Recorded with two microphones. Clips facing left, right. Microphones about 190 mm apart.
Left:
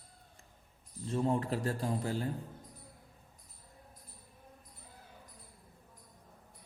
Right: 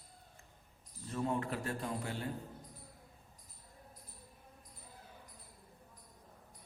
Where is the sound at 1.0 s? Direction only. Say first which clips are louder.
Left 5 dB; 30° left (ahead or behind).